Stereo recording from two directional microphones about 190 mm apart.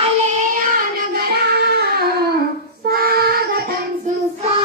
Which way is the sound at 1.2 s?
55° right (ahead or behind).